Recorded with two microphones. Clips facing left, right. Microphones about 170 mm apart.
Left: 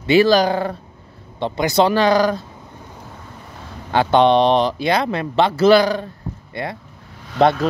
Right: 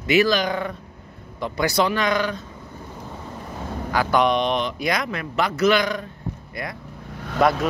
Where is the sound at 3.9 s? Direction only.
30° left (ahead or behind).